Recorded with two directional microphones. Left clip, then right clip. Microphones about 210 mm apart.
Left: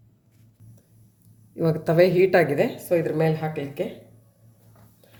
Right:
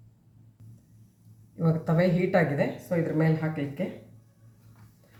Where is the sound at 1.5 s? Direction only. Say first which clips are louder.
Left 8 dB; 50° left (ahead or behind).